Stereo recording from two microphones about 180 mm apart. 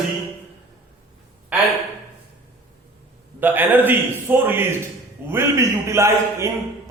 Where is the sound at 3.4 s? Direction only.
10° right (ahead or behind).